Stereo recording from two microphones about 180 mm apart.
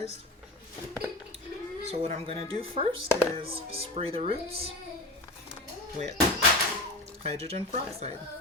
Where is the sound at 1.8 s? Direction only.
35° right (ahead or behind).